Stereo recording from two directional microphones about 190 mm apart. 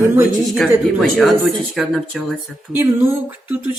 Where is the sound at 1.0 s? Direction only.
Centre (ahead or behind).